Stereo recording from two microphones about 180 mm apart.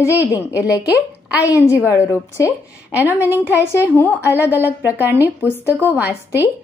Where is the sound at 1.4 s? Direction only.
20° left (ahead or behind).